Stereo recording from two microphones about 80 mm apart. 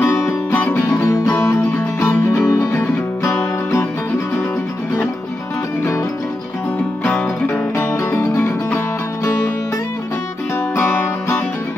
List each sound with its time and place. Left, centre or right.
0.3 s music: left
7.1 s music: centre
7.7 s music: left
10.8 s music: left